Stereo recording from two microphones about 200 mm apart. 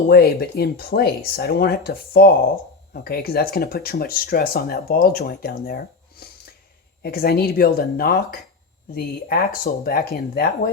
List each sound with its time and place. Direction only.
0.1 s speech: 50° left (ahead or behind)